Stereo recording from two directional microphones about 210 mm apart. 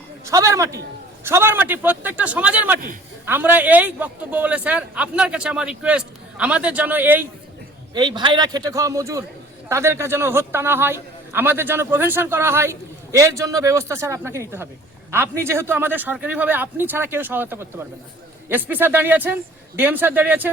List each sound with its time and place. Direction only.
0.3 s a man's voice: 15° right (ahead or behind)
7.9 s a man's voice: 20° right (ahead or behind)